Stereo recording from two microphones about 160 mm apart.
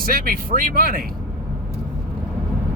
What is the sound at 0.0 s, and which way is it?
Speech, 65° right (ahead or behind).